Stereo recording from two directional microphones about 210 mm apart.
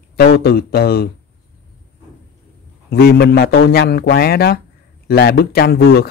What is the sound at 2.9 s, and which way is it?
Speech, 50° left (ahead or behind).